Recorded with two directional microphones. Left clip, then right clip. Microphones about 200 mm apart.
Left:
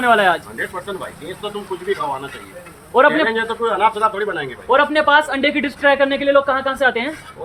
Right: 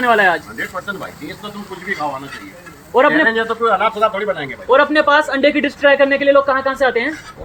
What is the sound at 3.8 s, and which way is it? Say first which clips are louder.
Speech: even; 25° left (ahead or behind).